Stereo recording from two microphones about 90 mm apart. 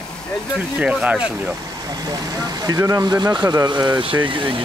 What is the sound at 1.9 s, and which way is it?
Speech, 45° right (ahead or behind).